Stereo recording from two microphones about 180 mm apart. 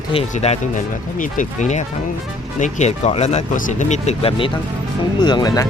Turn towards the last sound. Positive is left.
turn(degrees=20)  # may be behind; listen again after turning